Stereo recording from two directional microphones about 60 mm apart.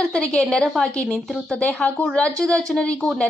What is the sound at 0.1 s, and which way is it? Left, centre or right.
Speech, centre.